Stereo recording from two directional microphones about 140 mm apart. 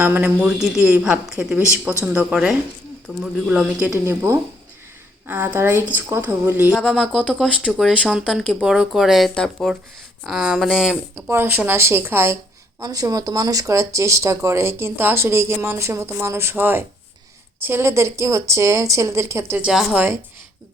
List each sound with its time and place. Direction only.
0.0 s speech: 15° right (ahead or behind)
6.8 s speech: centre (ahead or behind)
11.1 s speech: 15° right (ahead or behind)
19.6 s speech: 5° right (ahead or behind)